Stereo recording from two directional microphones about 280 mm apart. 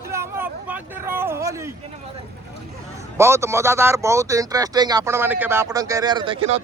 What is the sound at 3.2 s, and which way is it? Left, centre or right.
Speech, centre.